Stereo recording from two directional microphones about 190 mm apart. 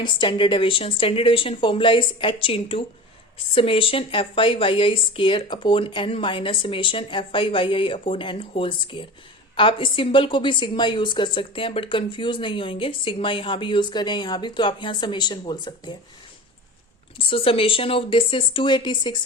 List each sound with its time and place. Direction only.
0.0 s a woman's voice: 25° left (ahead or behind)
17.2 s a woman's voice: 30° left (ahead or behind)